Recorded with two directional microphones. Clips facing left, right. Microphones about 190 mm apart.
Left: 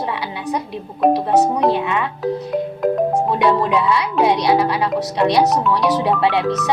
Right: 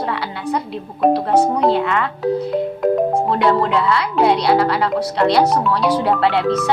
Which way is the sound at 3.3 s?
15° left (ahead or behind).